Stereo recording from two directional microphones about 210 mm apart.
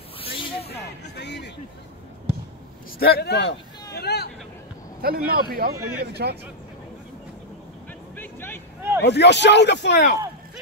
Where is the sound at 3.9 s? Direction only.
50° left (ahead or behind).